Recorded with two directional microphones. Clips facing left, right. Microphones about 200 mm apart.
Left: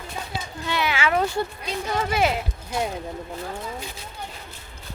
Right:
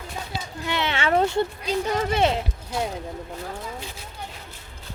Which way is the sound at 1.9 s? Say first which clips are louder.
Even; 35° right (ahead or behind).